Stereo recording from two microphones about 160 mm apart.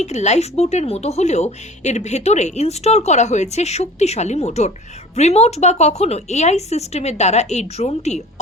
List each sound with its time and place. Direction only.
0.0 s speech: 45° left (ahead or behind)